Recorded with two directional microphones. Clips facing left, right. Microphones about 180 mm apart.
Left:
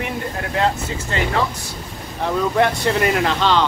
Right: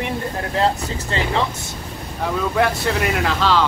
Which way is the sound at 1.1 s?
30° right (ahead or behind).